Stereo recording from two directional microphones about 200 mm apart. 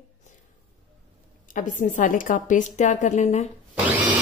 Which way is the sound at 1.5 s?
40° left (ahead or behind).